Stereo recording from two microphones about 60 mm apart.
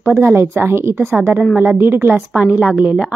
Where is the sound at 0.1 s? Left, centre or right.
Right.